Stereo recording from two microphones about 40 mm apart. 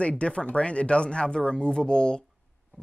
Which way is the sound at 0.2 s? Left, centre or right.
Left.